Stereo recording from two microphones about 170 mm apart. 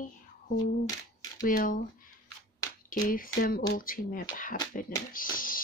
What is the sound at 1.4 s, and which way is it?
Speech, 50° left (ahead or behind).